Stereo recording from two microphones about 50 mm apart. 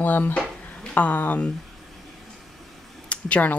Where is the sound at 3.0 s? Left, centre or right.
Left.